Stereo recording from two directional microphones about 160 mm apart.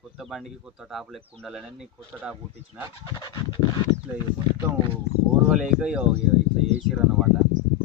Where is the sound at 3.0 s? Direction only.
25° left (ahead or behind).